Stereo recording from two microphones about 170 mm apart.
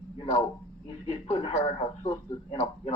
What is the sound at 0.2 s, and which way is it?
Speech, 40° left (ahead or behind).